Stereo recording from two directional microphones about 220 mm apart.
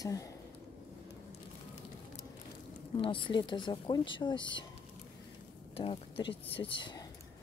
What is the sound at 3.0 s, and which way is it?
Speech, 25° left (ahead or behind).